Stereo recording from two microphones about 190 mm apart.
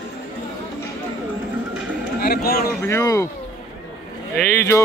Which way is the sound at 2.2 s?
55° left (ahead or behind).